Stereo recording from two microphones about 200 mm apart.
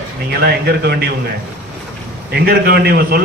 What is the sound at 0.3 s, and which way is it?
Speech, 55° right (ahead or behind).